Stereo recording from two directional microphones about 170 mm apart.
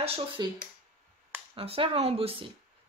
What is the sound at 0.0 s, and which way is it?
Speech, 35° right (ahead or behind).